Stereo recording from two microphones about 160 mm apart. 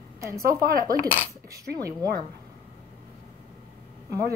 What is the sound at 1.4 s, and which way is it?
Speech, 20° right (ahead or behind).